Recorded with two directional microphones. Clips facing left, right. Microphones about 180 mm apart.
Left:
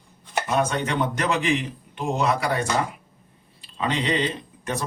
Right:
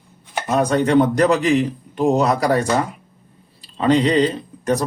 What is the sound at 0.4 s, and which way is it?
Speech, 40° right (ahead or behind).